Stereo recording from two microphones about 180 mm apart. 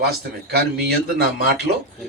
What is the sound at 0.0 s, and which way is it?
Speech, 60° right (ahead or behind).